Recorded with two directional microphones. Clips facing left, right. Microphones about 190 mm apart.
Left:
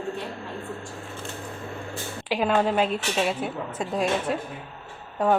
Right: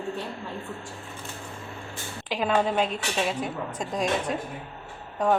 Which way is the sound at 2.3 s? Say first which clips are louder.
Left 2 dB; 5° left (ahead or behind).